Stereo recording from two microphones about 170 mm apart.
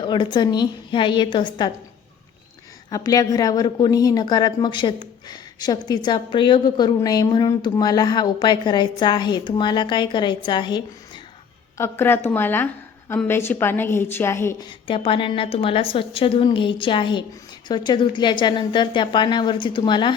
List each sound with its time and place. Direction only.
0.0 s a woman's voice: 25° left (ahead or behind)
2.9 s a woman's voice: 20° left (ahead or behind)
11.8 s a woman's voice: 15° left (ahead or behind)
14.7 s a woman's voice: 30° left (ahead or behind)